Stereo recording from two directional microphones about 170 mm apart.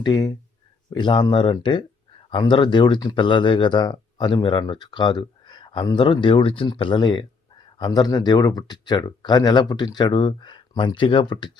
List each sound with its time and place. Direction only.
0.0 s speech: 20° left (ahead or behind)